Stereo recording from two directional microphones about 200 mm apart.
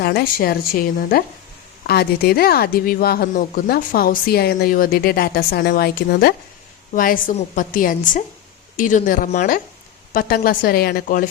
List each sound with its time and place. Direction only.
0.0 s a woman's voice: 55° left (ahead or behind)